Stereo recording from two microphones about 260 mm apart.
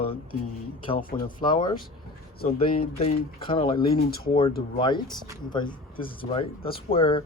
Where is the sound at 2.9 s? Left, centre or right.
Left.